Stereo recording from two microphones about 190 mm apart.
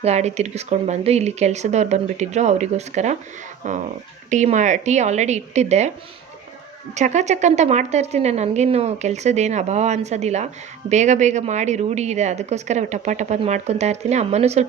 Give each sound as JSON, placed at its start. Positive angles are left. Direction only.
{"t": 0.0, "sound": "a woman's voice", "side_deg": -35}
{"t": 6.9, "sound": "a woman's voice", "side_deg": -40}